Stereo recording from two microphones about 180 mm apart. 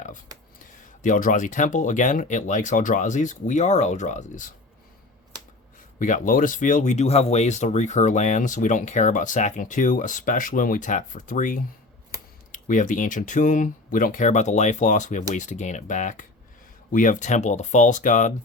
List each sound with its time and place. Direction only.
0.6 s speech: 50° left (ahead or behind)
6.0 s speech: 45° left (ahead or behind)